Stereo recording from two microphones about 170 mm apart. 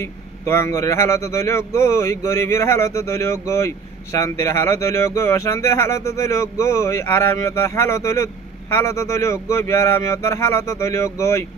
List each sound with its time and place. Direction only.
0.0 s a man's voice: 15° left (ahead or behind)